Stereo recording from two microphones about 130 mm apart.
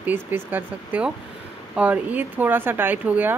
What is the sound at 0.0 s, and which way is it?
Speech, 15° right (ahead or behind).